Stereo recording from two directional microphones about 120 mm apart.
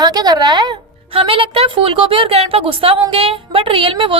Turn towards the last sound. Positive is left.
turn(degrees=-45)  # may be behind; listen again after turning